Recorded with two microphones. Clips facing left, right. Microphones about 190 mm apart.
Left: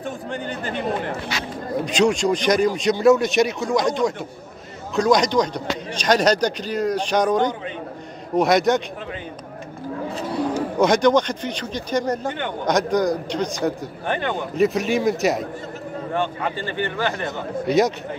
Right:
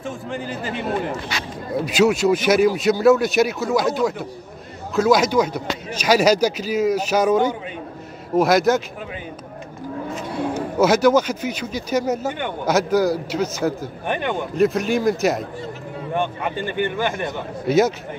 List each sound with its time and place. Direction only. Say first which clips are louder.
0.0 s a man's voice: even; centre (ahead or behind)
10.8 s speech: right 1 dB; 5° right (ahead or behind)
14.0 s speech: even; 15° right (ahead or behind)
14.3 s a man's voice: right 1 dB; centre (ahead or behind)
16.1 s speech: right 1 dB; 15° right (ahead or behind)
17.6 s a man's voice: right 2 dB; centre (ahead or behind)